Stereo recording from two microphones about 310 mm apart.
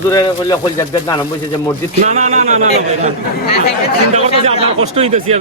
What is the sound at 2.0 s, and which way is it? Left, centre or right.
A man's voice, right.